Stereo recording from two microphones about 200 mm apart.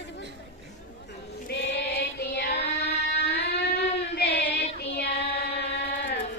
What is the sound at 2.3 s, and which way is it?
Child singing, 55° left (ahead or behind).